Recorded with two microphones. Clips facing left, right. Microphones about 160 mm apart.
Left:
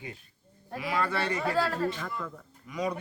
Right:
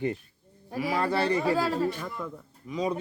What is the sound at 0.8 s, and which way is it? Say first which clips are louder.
Speech: right 4 dB; 35° right (ahead or behind).